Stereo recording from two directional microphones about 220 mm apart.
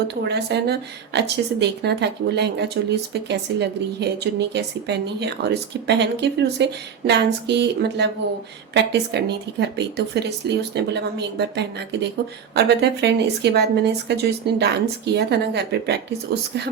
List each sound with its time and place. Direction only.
0.3 s a woman's voice: 50° right (ahead or behind)
12.5 s a woman's voice: 50° right (ahead or behind)